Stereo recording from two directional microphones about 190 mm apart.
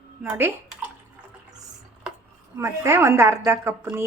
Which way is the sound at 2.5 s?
15° right (ahead or behind).